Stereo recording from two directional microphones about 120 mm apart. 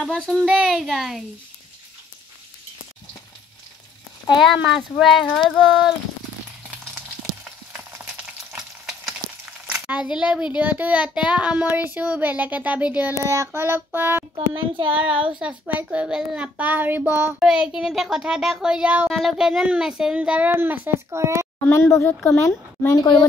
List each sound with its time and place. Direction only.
0.0 s speech: 5° left (ahead or behind)
4.4 s speech: 5° right (ahead or behind)
7.7 s frying: 10° right (ahead or behind)
9.7 s a child's voice: 10° right (ahead or behind)
13.2 s child singing: 25° right (ahead or behind)
14.3 s a child's voice: 50° right (ahead or behind)
15.0 s a child's voice: 10° right (ahead or behind)
17.4 s a child's voice: 5° right (ahead or behind); by 21.5 s 25° right (ahead or behind)
21.6 s speech: 20° left (ahead or behind)